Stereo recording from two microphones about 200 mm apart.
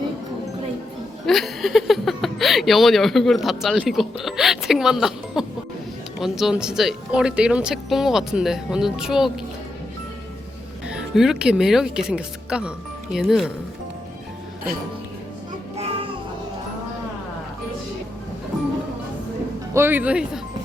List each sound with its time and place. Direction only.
1.3 s speech: centre (ahead or behind)
10.8 s speech: 5° right (ahead or behind)
19.7 s speech: 10° right (ahead or behind)